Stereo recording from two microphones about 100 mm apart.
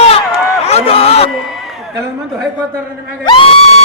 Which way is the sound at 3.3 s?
60° left (ahead or behind).